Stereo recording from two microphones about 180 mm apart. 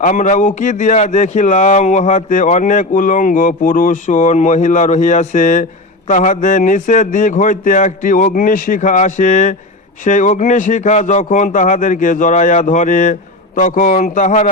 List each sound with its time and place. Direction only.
0.0 s speech: 45° left (ahead or behind)